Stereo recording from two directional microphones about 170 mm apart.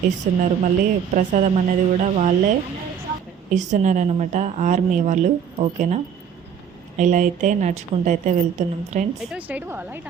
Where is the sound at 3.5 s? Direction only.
45° right (ahead or behind).